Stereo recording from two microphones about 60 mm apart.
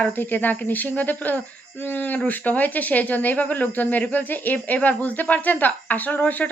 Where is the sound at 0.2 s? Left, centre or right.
Left.